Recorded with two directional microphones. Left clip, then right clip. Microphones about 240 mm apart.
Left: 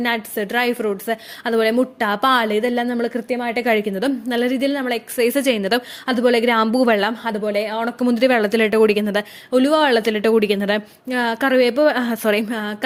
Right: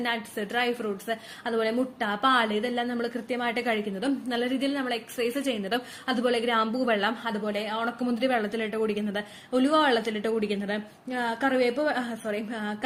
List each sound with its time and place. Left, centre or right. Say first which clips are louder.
0.0 s a woman's voice: left 8 dB; left